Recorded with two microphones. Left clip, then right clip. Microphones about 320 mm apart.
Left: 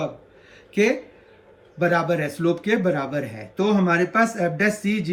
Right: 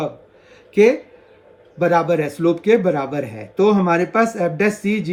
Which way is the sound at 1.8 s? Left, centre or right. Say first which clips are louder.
Right 5 dB; centre.